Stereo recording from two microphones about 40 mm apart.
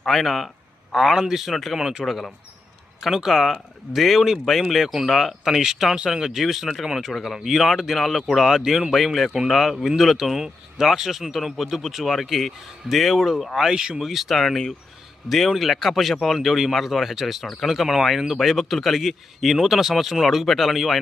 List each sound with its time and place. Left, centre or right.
0.1 s speech: centre
1.7 s speech: centre
2.0 s speech: centre
6.8 s speech: centre
7.1 s speech: centre
10.2 s speech: centre
13.7 s speech: right
14.0 s speech: centre